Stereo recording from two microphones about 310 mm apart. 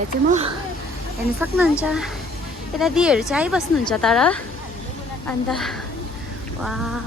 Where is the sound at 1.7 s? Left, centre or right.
Centre.